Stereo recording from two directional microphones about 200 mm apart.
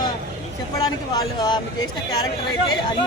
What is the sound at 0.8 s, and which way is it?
Speech, 20° left (ahead or behind).